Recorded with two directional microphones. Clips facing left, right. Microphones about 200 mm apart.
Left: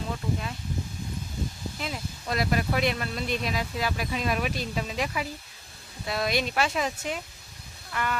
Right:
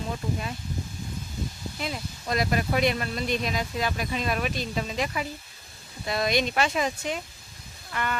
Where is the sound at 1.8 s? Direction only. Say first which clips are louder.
Right 3 dB; centre (ahead or behind).